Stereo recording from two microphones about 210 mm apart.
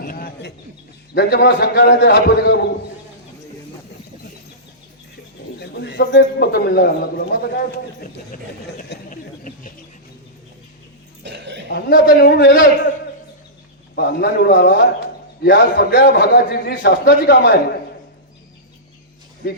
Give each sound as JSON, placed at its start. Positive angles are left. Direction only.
{"t": 0.0, "sound": "a sound", "side_deg": 45}
{"t": 1.1, "sound": "a man's voice", "side_deg": 50}
{"t": 5.5, "sound": "a man's voice", "side_deg": 55}
{"t": 8.8, "sound": "a sound", "side_deg": 40}
{"t": 11.2, "sound": "dog", "side_deg": -55}
{"t": 11.7, "sound": "a man's voice", "side_deg": 45}
{"t": 13.9, "sound": "a man's voice", "side_deg": 50}